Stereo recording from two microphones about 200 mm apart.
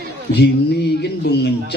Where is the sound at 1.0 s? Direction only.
60° left (ahead or behind).